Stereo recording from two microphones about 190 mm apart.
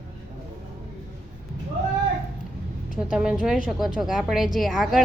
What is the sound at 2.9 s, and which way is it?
A woman's voice, 5° right (ahead or behind).